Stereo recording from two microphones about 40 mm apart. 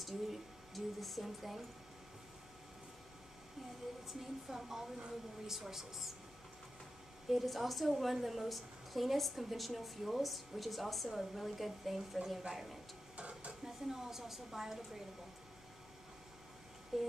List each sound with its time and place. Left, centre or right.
0.0 s speech: centre
4.1 s speech: centre
7.2 s a woman's voice: centre
13.1 s a sound: right
13.7 s speech: centre
16.9 s speech: centre